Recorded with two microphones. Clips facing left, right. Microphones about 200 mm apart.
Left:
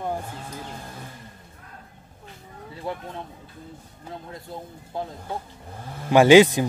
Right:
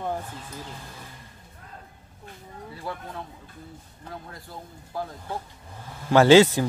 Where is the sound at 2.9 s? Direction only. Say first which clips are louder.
Left 4 dB; 25° left (ahead or behind).